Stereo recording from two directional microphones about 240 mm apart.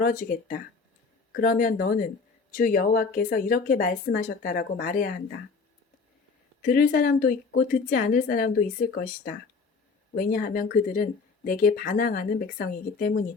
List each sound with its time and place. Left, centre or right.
0.0 s speech: left
6.6 s speech: left